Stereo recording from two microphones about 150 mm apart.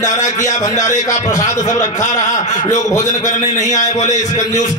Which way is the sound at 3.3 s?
55° left (ahead or behind).